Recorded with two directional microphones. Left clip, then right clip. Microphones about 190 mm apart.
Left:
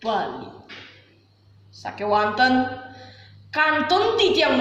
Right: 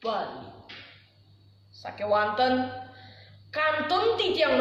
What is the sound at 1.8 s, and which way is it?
Speech, 15° right (ahead or behind).